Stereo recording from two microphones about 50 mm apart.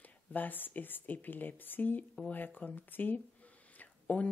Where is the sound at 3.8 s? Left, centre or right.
Left.